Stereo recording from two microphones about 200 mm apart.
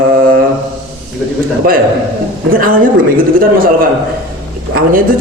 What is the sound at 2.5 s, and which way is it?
A man's voice, 45° right (ahead or behind).